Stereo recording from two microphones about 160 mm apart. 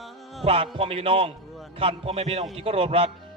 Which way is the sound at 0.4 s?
35° right (ahead or behind).